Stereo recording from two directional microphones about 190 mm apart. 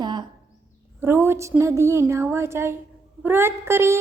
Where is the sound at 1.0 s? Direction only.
15° right (ahead or behind).